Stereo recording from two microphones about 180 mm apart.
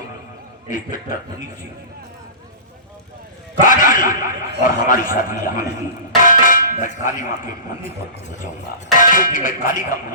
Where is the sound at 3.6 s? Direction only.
45° left (ahead or behind).